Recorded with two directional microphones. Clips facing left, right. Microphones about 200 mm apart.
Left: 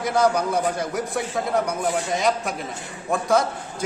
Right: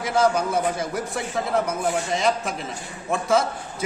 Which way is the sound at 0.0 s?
5° right (ahead or behind).